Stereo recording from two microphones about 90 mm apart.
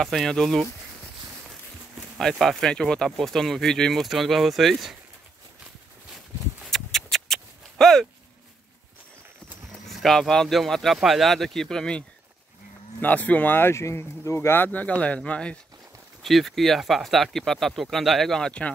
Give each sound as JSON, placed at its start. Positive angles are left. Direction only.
{"t": 0.0, "sound": "speech", "side_deg": 5}
{"t": 2.1, "sound": "speech", "side_deg": 0}
{"t": 6.6, "sound": "a sound", "side_deg": 0}
{"t": 9.7, "sound": "speech", "side_deg": 0}
{"t": 13.0, "sound": "speech", "side_deg": 15}
{"t": 16.2, "sound": "speech", "side_deg": 0}